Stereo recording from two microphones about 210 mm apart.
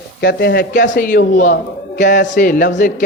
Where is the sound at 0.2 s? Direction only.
50° left (ahead or behind).